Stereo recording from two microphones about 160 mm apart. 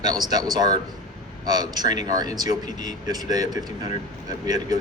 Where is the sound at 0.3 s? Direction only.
25° right (ahead or behind).